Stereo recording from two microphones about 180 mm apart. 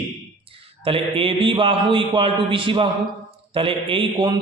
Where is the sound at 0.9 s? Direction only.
30° right (ahead or behind).